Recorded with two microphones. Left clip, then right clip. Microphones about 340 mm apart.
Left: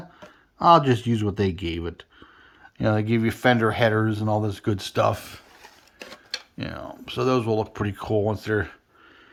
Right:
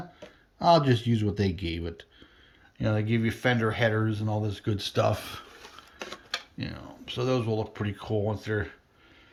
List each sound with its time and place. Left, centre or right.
0.6 s speech: centre
6.6 s speech: centre